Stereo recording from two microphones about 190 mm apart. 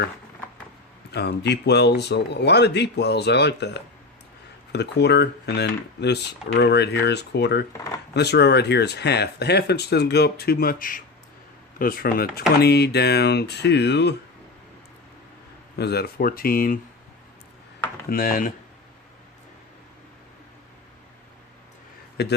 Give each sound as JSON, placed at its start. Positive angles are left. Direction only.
{"t": 1.1, "sound": "speech", "side_deg": 60}
{"t": 15.7, "sound": "speech", "side_deg": 60}
{"t": 18.1, "sound": "speech", "side_deg": 50}
{"t": 22.2, "sound": "speech", "side_deg": 60}